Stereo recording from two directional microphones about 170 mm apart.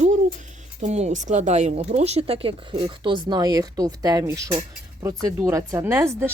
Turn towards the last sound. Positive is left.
turn(degrees=-15)  # may be behind; listen again after turning